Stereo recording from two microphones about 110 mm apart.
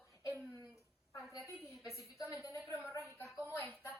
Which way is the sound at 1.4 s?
30° left (ahead or behind).